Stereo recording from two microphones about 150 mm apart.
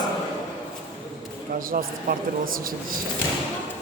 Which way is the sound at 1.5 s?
70° right (ahead or behind).